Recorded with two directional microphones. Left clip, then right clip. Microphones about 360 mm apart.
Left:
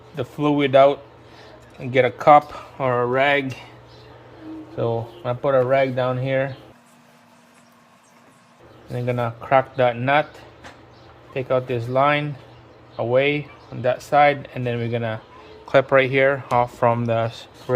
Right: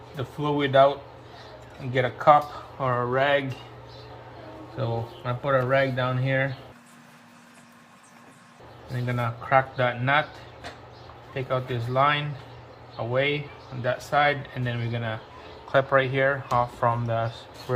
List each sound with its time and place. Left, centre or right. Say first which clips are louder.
0.2 s speech: left 6 dB; left
4.8 s speech: left 7 dB; left
9.0 s speech: left 5 dB; left
11.3 s speech: left 7 dB; left